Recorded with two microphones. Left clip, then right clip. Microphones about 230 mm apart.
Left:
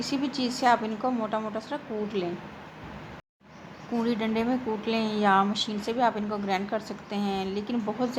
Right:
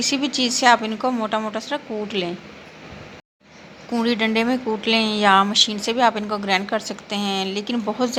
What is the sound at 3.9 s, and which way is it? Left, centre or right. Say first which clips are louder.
A woman's voice: right 8 dB; centre.